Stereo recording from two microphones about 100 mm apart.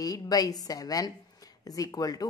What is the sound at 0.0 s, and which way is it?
Speech, 40° left (ahead or behind).